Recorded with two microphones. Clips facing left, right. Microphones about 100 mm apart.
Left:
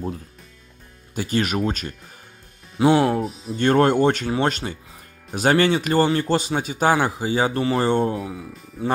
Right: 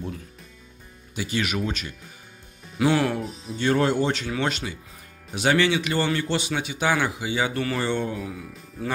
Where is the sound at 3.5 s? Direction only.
50° left (ahead or behind).